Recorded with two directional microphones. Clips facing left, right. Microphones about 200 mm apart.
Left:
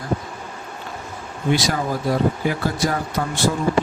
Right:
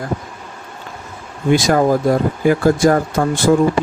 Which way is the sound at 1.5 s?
50° right (ahead or behind).